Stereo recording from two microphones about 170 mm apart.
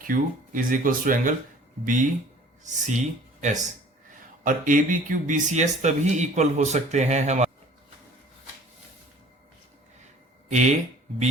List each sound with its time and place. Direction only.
0.0 s speech: 55° right (ahead or behind)